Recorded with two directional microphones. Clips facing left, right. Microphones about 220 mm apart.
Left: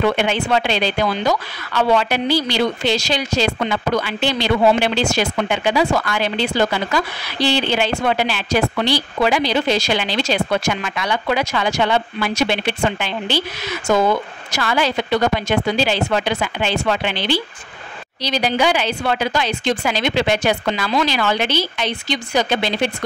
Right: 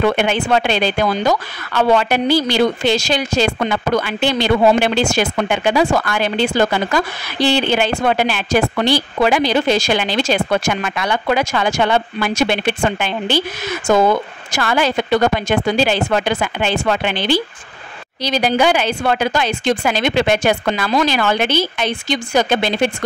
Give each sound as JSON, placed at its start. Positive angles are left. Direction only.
{"t": 0.0, "sound": "speech", "side_deg": -50}